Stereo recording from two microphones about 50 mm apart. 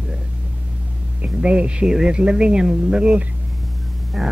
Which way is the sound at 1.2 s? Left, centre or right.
Right.